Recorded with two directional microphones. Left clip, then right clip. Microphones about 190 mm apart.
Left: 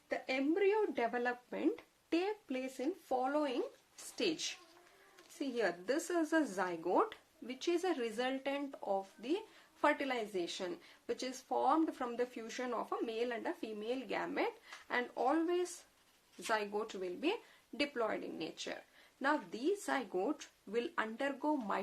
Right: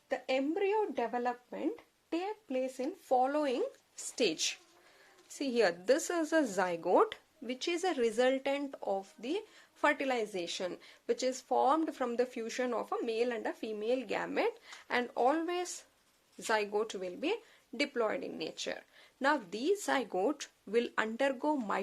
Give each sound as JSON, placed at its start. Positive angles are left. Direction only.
{"t": 0.1, "sound": "speech", "side_deg": -35}
{"t": 2.5, "sound": "speech", "side_deg": -20}